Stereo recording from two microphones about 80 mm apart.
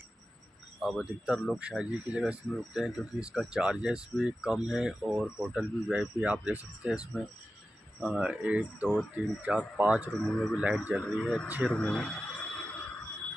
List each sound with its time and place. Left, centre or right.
0.7 s speech: centre
7.1 s speech: centre
8.0 s speech: centre
10.1 s speech: centre
10.5 s speech: centre
11.0 s speech: centre
11.7 s a sound: centre